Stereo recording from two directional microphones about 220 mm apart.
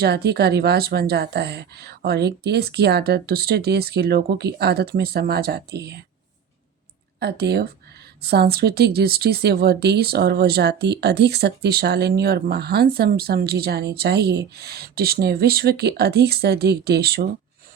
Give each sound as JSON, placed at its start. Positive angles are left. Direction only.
{"t": 0.0, "sound": "speech", "side_deg": -45}
{"t": 7.2, "sound": "speech", "side_deg": -50}